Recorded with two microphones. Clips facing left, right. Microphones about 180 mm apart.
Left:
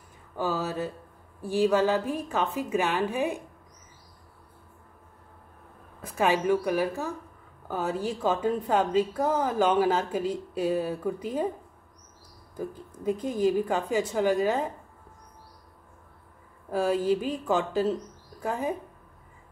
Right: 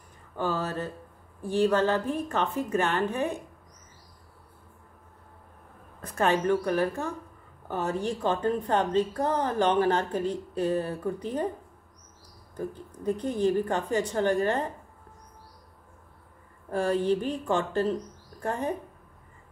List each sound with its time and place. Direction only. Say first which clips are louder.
0.4 s a woman's voice: left 1 dB; 5° left (ahead or behind)
5.9 s a woman's voice: even; 10° left (ahead or behind)
12.5 s a woman's voice: even; 10° left (ahead or behind)
16.7 s a woman's voice: left 1 dB; 5° left (ahead or behind)